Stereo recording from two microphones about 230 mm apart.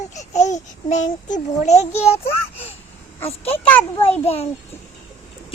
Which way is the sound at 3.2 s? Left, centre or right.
Left.